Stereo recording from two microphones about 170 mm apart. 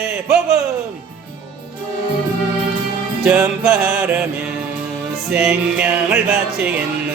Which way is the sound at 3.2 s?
5° right (ahead or behind).